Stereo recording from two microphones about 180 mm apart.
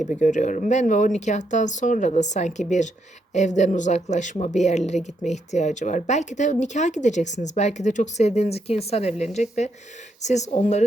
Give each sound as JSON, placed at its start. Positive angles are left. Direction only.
{"t": 0.2, "sound": "speech", "side_deg": 45}